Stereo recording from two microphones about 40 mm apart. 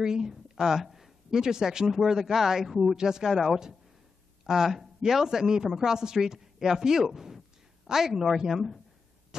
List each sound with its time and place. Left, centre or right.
0.0 s a woman's voice: centre
9.3 s hum: centre